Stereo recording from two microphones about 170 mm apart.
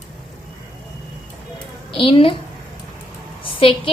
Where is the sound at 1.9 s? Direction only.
30° left (ahead or behind).